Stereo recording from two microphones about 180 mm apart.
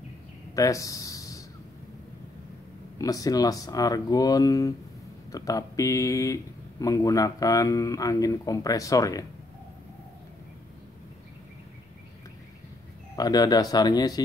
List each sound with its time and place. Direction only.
0.6 s speech: 20° left (ahead or behind)
3.0 s speech: 20° left (ahead or behind)
13.1 s speech: 20° left (ahead or behind)